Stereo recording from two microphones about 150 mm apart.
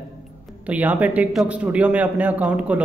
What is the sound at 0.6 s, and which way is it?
A man's voice, 10° right (ahead or behind).